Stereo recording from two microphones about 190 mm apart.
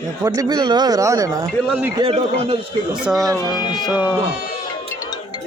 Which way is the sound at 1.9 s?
30° right (ahead or behind).